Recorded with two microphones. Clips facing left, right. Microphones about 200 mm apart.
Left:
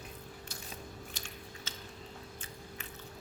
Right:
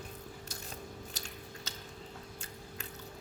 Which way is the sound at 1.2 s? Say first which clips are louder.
Right 1 dB; 40° right (ahead or behind).